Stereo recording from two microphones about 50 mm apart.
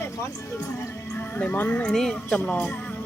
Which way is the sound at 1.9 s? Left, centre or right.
Centre.